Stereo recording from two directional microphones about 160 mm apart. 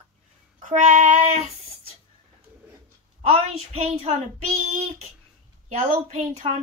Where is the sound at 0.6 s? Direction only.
55° right (ahead or behind).